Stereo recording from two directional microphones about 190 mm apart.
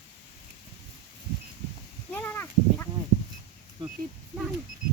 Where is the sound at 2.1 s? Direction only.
10° left (ahead or behind).